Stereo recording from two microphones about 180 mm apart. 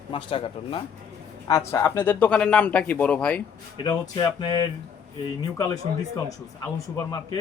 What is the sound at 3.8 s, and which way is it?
Speech, 25° left (ahead or behind).